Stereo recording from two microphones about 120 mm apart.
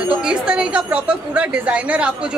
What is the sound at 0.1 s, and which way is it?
A woman's voice, 10° right (ahead or behind).